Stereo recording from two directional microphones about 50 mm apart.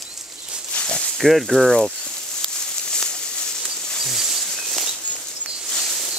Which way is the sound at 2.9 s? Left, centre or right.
Centre.